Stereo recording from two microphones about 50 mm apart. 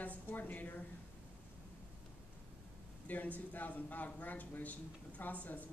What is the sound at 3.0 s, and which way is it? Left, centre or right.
A man's voice, left.